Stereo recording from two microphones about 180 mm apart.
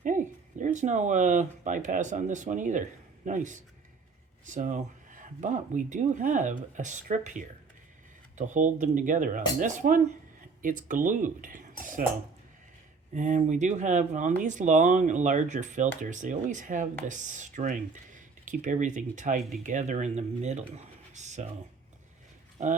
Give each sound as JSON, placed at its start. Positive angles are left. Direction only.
{"t": 0.0, "sound": "speech", "side_deg": -45}
{"t": 13.1, "sound": "speech", "side_deg": -40}
{"t": 22.6, "sound": "speech", "side_deg": -40}